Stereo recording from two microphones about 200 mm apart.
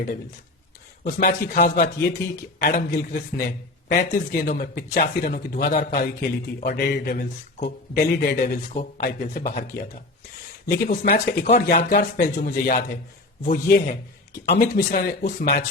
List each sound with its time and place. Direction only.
1.0 s speech: 50° left (ahead or behind)